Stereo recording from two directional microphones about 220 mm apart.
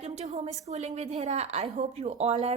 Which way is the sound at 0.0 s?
30° right (ahead or behind).